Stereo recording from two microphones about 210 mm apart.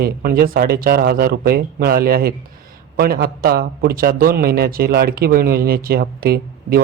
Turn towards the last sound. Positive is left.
turn(degrees=-45)  # may be behind; listen again after turning